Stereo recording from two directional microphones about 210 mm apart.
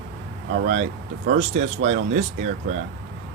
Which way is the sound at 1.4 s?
35° right (ahead or behind).